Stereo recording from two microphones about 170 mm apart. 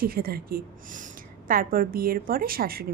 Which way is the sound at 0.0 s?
60° right (ahead or behind).